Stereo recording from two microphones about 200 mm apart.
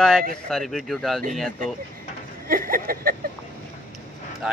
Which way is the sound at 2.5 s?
45° right (ahead or behind).